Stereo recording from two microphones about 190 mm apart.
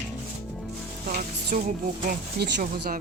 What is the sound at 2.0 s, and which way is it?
Speech, 60° right (ahead or behind).